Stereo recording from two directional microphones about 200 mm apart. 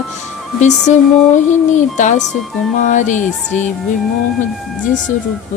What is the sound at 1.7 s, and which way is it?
A woman's voice, 35° left (ahead or behind).